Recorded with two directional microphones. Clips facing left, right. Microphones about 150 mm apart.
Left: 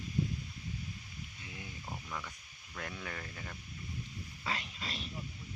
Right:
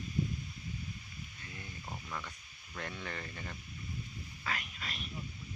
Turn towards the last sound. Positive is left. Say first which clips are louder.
# left 1 dB
turn(degrees=30)  # may be behind; listen again after turning